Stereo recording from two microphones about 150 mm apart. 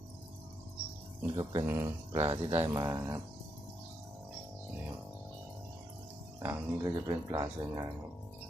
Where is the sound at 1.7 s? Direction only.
15° right (ahead or behind).